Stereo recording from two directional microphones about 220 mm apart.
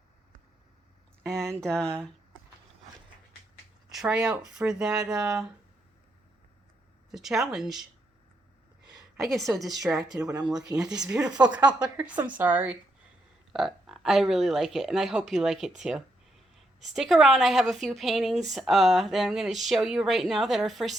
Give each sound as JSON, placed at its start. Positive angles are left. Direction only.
{"t": 1.2, "sound": "a sound", "side_deg": 5}
{"t": 1.6, "sound": "speech", "side_deg": 5}
{"t": 3.9, "sound": "speech", "side_deg": -5}
{"t": 7.1, "sound": "speech", "side_deg": 0}
{"t": 9.3, "sound": "speech", "side_deg": 0}
{"t": 11.3, "sound": "speech", "side_deg": -20}
{"t": 11.8, "sound": "speech", "side_deg": -5}